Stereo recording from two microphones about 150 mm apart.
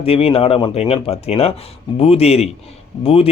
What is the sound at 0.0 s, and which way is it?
Speech, 40° left (ahead or behind).